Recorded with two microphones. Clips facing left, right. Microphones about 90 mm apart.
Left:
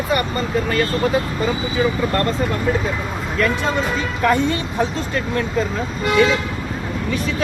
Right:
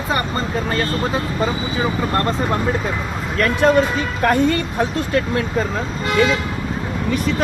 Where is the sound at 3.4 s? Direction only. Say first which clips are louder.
Right 5 dB; 65° right (ahead or behind).